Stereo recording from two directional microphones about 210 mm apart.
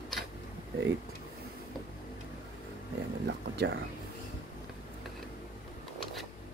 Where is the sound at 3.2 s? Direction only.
55° right (ahead or behind).